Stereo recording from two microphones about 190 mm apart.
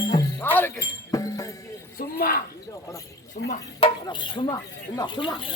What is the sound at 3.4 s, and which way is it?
Speech, 70° left (ahead or behind).